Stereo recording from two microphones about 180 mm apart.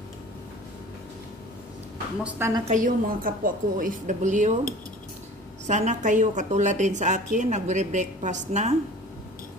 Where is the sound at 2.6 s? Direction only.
45° right (ahead or behind).